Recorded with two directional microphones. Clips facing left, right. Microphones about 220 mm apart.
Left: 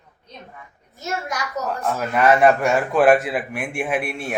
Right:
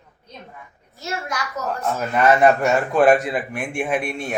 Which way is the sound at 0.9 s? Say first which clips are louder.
Left 1 dB; 20° left (ahead or behind).